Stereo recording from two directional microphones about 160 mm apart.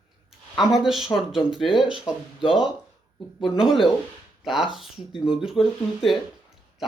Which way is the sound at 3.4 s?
5° right (ahead or behind).